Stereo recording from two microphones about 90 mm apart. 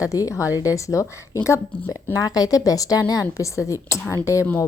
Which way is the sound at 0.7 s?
35° left (ahead or behind).